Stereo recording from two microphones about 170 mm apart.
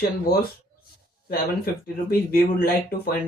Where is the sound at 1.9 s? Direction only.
60° left (ahead or behind).